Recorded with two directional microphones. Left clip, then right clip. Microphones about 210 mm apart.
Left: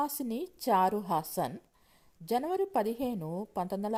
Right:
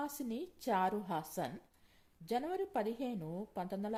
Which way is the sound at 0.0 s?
30° left (ahead or behind).